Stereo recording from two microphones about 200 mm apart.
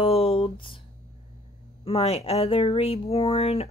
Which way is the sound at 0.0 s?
30° left (ahead or behind).